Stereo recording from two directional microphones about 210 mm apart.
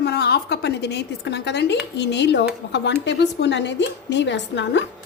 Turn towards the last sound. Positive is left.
turn(degrees=55)  # may be behind; listen again after turning